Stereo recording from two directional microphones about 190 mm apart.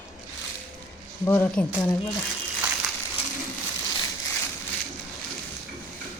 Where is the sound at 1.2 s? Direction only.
10° left (ahead or behind).